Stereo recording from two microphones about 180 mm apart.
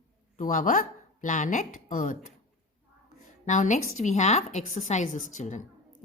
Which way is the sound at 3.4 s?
40° left (ahead or behind).